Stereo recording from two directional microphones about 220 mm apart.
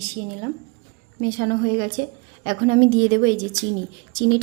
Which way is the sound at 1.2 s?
50° right (ahead or behind).